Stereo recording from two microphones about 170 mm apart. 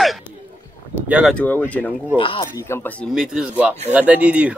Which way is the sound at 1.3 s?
10° left (ahead or behind).